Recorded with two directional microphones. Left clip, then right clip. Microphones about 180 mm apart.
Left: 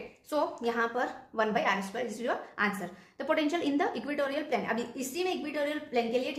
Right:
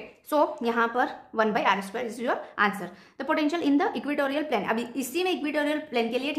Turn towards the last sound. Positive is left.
turn(degrees=-45)  # may be behind; listen again after turning